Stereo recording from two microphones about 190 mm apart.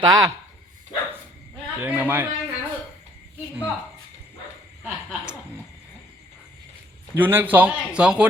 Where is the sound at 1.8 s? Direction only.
10° right (ahead or behind).